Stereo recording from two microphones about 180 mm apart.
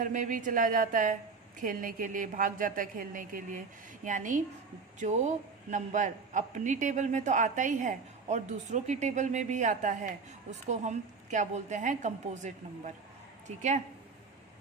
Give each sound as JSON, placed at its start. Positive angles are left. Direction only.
{"t": 0.0, "sound": "a man's voice", "side_deg": -45}